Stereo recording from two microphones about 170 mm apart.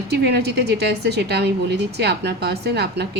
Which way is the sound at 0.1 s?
75° right (ahead or behind).